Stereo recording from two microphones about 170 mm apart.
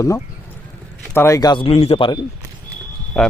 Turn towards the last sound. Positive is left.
turn(degrees=0)  # may be behind; listen again after turning